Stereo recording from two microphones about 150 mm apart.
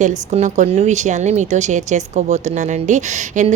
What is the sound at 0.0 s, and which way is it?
A woman's voice, 50° right (ahead or behind).